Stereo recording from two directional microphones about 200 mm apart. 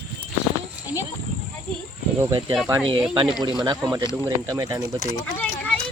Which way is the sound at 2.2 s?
20° right (ahead or behind).